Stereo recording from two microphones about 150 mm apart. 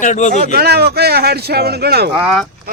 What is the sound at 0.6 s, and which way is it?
Speech, 90° right.